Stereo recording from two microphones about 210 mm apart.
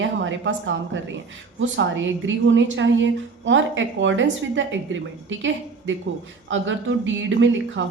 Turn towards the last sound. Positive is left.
turn(degrees=-65)  # may be behind; listen again after turning